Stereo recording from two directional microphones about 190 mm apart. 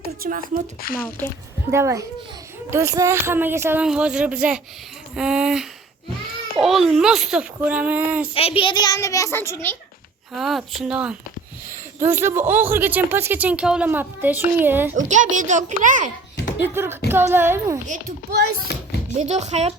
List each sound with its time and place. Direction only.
0.2 s a child's voice: 45° right (ahead or behind)
0.8 s speech: 50° left (ahead or behind)
1.7 s a child's voice: 15° right (ahead or behind)
8.3 s a child's voice: 30° left (ahead or behind); by 9.5 s 15° left (ahead or behind)
10.3 s a child's voice: centre (ahead or behind)
14.9 s a child's voice: 40° right (ahead or behind)
16.6 s speech: 10° right (ahead or behind)
17.8 s a child's voice: 45° right (ahead or behind)
18.3 s a child's voice: 55° right (ahead or behind)
19.2 s a child's voice: 35° right (ahead or behind)